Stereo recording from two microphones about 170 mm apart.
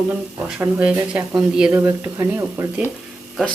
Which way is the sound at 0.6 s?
10° right (ahead or behind).